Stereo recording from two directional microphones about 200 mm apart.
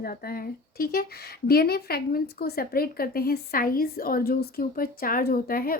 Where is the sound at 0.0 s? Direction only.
50° left (ahead or behind).